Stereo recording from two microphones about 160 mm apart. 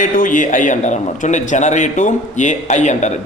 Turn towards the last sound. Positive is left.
turn(degrees=45)  # may be behind; listen again after turning